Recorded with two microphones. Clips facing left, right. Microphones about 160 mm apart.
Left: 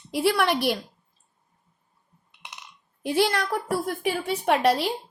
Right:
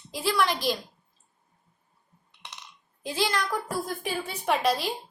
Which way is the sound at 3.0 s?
60° left (ahead or behind).